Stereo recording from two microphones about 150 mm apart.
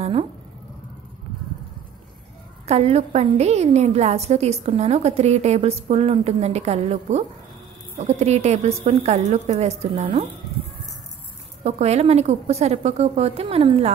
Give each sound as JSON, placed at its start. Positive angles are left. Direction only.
{"t": 0.0, "sound": "speech", "side_deg": -40}
{"t": 2.6, "sound": "a woman's voice", "side_deg": -45}
{"t": 11.6, "sound": "a woman's voice", "side_deg": -45}